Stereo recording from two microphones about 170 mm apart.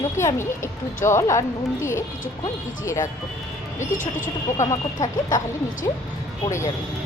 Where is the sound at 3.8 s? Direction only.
50° left (ahead or behind).